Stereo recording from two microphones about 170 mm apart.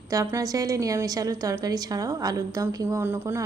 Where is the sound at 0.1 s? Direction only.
20° right (ahead or behind).